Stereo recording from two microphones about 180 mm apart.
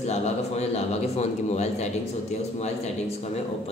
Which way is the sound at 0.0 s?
40° left (ahead or behind).